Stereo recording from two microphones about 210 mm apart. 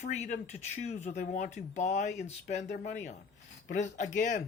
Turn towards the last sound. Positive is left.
turn(degrees=35)  # may be behind; listen again after turning